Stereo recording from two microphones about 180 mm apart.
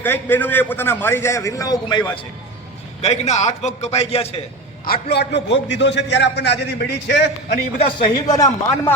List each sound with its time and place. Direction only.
0.0 s a man's voice: 10° left (ahead or behind)
3.0 s a man's voice: 40° left (ahead or behind)
4.9 s a man's voice: 65° left (ahead or behind)
7.5 s a man's voice: 30° left (ahead or behind)